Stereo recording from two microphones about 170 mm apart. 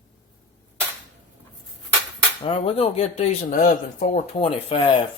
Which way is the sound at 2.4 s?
40° left (ahead or behind).